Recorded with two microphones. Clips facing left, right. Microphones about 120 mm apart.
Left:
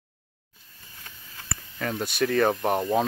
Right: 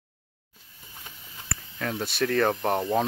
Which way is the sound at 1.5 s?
Centre (ahead or behind).